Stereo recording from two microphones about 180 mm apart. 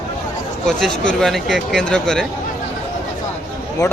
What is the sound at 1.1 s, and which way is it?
A man's voice, centre (ahead or behind).